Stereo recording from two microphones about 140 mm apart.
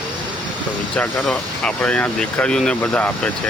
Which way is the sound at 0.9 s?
10° left (ahead or behind).